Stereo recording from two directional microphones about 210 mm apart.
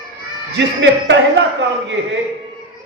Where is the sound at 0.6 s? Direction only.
60° right (ahead or behind).